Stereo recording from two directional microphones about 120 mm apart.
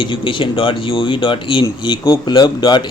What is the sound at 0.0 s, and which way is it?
Speech, 45° left (ahead or behind).